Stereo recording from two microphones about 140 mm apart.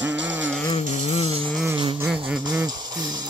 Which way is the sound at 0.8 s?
55° left (ahead or behind).